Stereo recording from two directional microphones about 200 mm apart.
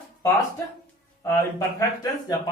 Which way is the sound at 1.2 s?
15° left (ahead or behind).